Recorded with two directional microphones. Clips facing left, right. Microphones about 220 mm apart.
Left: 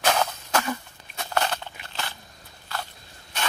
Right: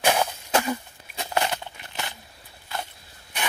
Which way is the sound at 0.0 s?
15° right (ahead or behind).